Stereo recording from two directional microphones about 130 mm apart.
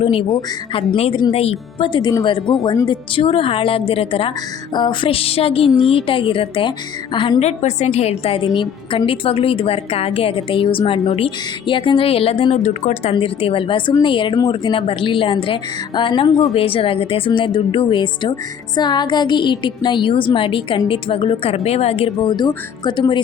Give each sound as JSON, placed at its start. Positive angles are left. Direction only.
{"t": 0.0, "sound": "a woman's voice", "side_deg": 45}
{"t": 1.3, "sound": "a woman's voice", "side_deg": 50}
{"t": 7.4, "sound": "a woman's voice", "side_deg": 60}
{"t": 13.1, "sound": "a woman's voice", "side_deg": 45}